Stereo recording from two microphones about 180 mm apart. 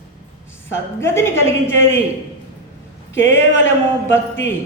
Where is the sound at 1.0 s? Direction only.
15° left (ahead or behind).